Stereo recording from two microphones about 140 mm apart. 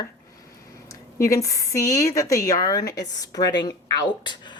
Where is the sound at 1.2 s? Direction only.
25° left (ahead or behind).